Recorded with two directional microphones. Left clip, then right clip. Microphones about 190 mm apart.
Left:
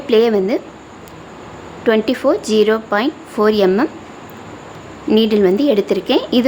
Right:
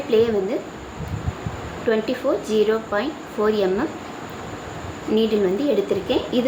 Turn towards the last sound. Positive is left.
turn(degrees=45)  # may be behind; listen again after turning